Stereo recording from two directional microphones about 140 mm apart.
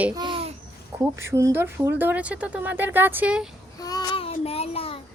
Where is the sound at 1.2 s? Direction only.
20° right (ahead or behind).